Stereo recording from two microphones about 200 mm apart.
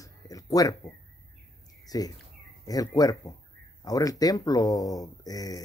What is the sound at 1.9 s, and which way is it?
Speech, 20° left (ahead or behind).